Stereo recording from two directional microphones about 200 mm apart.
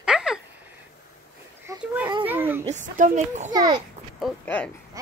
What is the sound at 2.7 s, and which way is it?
Speech, 35° right (ahead or behind).